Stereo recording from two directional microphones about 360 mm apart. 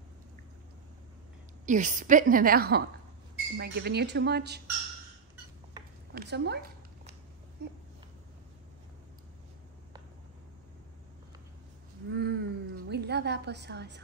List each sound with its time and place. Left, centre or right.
1.7 s a woman's voice: right
6.1 s a woman's voice: right
12.1 s a sound: right